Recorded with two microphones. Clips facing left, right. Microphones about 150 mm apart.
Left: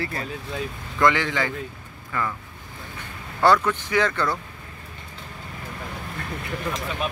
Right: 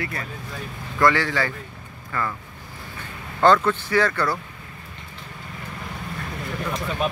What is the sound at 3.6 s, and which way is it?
Speech, 20° left (ahead or behind).